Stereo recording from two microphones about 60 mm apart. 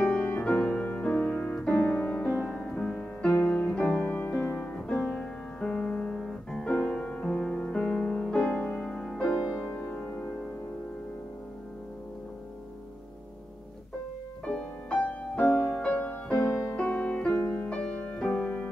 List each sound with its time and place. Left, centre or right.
0.0 s music: centre
1.7 s piano: left
2.4 s music: centre
2.7 s music: left
5.0 s music: centre
8.8 s music: centre
9.8 s music: centre
14.4 s music: centre
16.3 s music: left
16.7 s music: left